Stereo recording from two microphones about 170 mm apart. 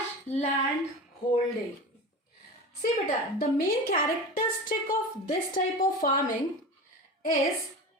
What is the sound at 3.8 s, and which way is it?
Speech, 55° left (ahead or behind).